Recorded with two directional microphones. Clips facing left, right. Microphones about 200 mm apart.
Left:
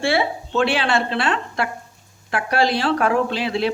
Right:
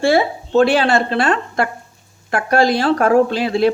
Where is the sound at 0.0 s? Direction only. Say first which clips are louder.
Right 5 dB; 40° right (ahead or behind).